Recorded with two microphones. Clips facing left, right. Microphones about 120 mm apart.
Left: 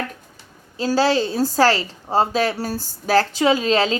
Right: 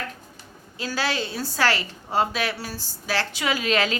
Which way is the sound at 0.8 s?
35° left (ahead or behind).